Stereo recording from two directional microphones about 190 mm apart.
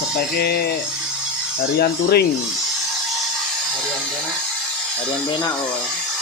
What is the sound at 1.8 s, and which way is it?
Speech, 55° left (ahead or behind).